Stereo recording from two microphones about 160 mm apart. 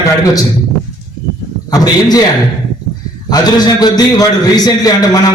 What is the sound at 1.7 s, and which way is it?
Speech, 25° left (ahead or behind).